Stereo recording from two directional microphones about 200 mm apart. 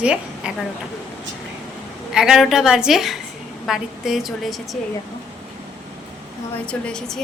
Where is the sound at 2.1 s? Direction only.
5° right (ahead or behind).